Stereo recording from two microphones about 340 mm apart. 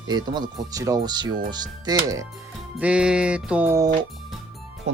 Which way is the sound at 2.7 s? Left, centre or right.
Centre.